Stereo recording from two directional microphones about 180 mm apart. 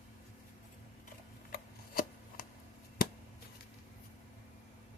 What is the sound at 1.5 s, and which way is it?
Chopping, 50° left (ahead or behind).